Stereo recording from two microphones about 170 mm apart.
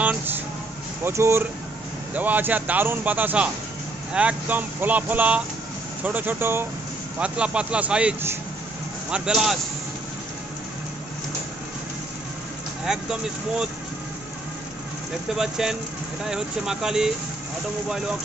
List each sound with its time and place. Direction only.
1.0 s a man's voice: 15° right (ahead or behind)
12.8 s speech: 5° right (ahead or behind)
15.3 s speech: 5° right (ahead or behind)